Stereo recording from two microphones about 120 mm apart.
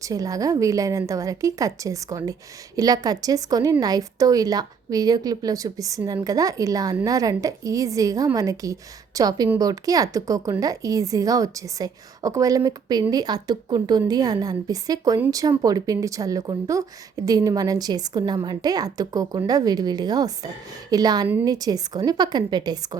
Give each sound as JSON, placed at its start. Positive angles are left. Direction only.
{"t": 0.0, "sound": "a woman's voice", "side_deg": -30}